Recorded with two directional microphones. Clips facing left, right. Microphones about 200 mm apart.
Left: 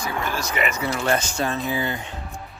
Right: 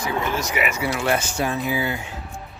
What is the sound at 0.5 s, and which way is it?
Speech, 10° right (ahead or behind).